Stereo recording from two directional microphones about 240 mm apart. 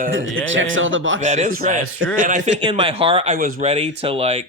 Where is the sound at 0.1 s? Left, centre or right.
Right.